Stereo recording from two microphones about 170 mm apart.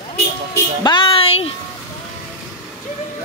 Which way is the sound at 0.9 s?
30° left (ahead or behind).